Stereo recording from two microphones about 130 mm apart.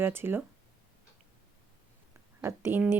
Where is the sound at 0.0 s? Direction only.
15° right (ahead or behind).